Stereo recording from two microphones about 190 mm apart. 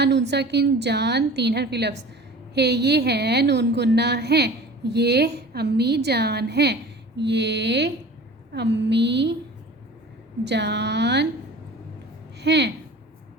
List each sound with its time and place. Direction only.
0.0 s a woman's voice: 65° right (ahead or behind)
10.4 s a woman's voice: 65° right (ahead or behind)
12.4 s a woman's voice: 65° right (ahead or behind)